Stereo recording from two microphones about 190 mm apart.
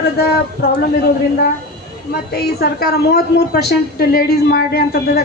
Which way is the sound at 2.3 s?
55° left (ahead or behind).